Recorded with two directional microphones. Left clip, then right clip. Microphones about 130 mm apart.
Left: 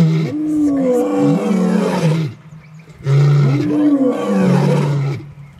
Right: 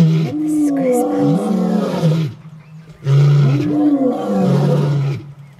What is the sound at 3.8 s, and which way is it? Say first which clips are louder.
Wild animals: left 1 dB; 20° left (ahead or behind).